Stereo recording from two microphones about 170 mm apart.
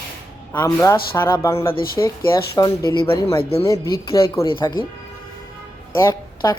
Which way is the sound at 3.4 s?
35° left (ahead or behind).